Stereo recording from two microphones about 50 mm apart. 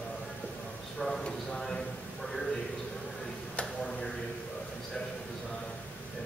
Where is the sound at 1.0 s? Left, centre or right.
Centre.